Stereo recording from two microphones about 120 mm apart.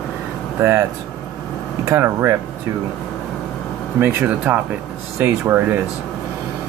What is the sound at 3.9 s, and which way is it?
Speech, 15° right (ahead or behind).